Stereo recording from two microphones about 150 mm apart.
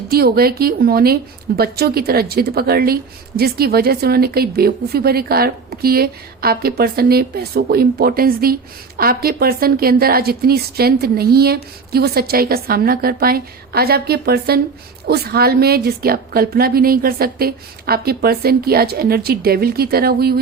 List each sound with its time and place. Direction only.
0.1 s a woman's voice: 90° right